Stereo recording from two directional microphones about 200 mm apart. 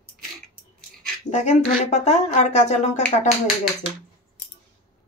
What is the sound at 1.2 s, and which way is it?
Speech, 35° left (ahead or behind).